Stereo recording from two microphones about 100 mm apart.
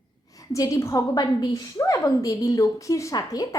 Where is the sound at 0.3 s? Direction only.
35° left (ahead or behind).